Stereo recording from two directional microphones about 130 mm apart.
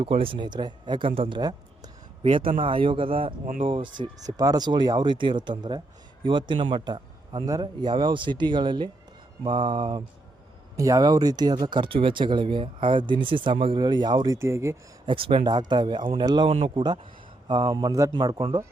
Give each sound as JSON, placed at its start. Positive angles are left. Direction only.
{"t": 0.0, "sound": "speech", "side_deg": -45}
{"t": 1.4, "sound": "a sound", "side_deg": -30}
{"t": 2.2, "sound": "a man's voice", "side_deg": -45}
{"t": 3.4, "sound": "speech", "side_deg": -90}
{"t": 3.7, "sound": "speech", "side_deg": -40}
{"t": 10.8, "sound": "speech", "side_deg": -25}
{"t": 14.3, "sound": "speech", "side_deg": -20}
{"t": 15.0, "sound": "a man's voice", "side_deg": -45}
{"t": 15.4, "sound": "speech", "side_deg": -35}
{"t": 16.5, "sound": "speech", "side_deg": -45}